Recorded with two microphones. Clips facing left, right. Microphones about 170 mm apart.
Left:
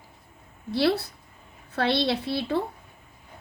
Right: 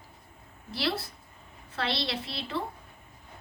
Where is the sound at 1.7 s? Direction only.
60° left (ahead or behind).